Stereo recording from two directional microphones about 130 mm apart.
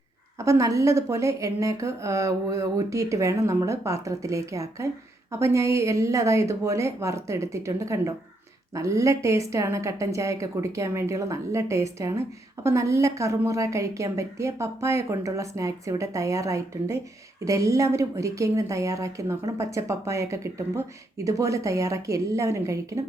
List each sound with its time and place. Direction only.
0.3 s a woman's voice: 25° right (ahead or behind)